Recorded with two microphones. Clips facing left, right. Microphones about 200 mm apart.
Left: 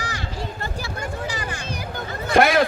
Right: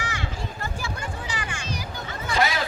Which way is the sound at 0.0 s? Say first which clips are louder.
Left 2 dB; 35° left (ahead or behind).